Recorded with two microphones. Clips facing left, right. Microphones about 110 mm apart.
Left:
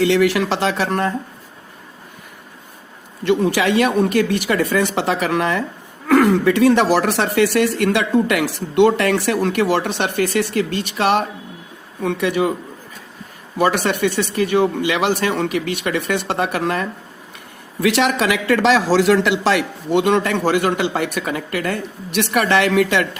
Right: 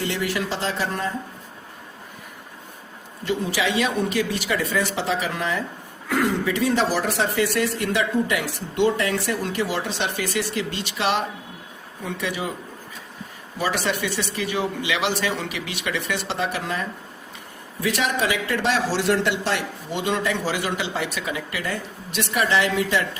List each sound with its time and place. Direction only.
0.0 s speech: 80° left
3.2 s a man's voice: 60° left (ahead or behind)
13.6 s a man's voice: 55° left (ahead or behind)
17.7 s a man's voice: 75° left (ahead or behind)